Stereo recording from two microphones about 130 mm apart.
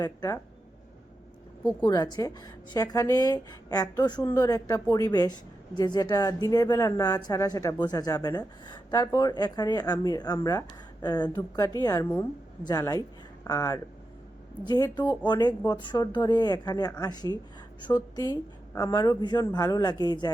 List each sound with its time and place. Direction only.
0.0 s a woman's voice: 25° left (ahead or behind)
1.8 s a woman's voice: 30° left (ahead or behind)